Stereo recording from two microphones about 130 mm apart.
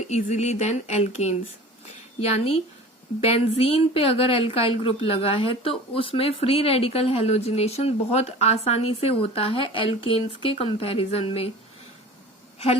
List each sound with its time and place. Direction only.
0.2 s a woman's voice: 65° left (ahead or behind)